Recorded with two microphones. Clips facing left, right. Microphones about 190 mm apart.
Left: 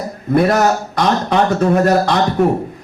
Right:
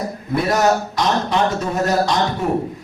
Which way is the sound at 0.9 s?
55° left (ahead or behind).